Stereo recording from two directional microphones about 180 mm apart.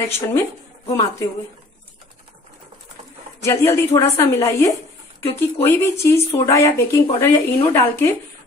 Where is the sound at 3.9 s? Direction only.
15° left (ahead or behind).